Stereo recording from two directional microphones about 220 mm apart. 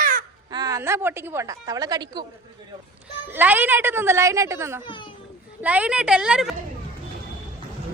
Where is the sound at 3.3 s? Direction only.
10° right (ahead or behind).